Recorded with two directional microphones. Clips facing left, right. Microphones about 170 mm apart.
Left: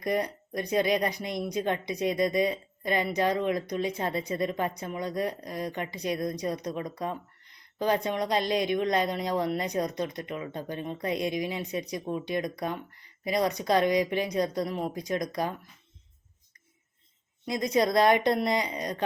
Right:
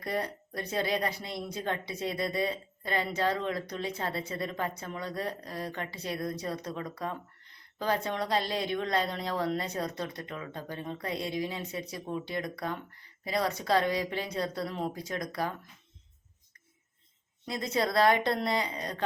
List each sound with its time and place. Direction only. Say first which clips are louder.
0.0 s a woman's voice: left 5 dB; 15° left (ahead or behind)
17.4 s a woman's voice: left 5 dB; 15° left (ahead or behind)